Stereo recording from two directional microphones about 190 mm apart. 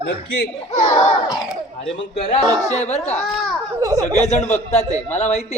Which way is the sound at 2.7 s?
35° left (ahead or behind).